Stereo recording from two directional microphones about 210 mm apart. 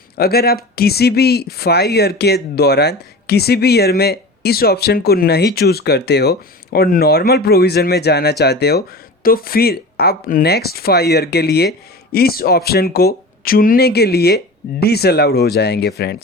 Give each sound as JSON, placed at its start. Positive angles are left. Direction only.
{"t": 0.2, "sound": "speech", "side_deg": 45}